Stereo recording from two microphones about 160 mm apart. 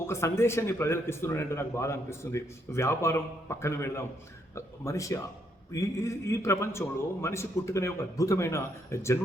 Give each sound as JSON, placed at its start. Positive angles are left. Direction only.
{"t": 0.1, "sound": "a man's voice", "side_deg": 15}